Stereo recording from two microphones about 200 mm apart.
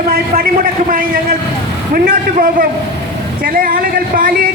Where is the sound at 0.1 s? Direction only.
45° right (ahead or behind).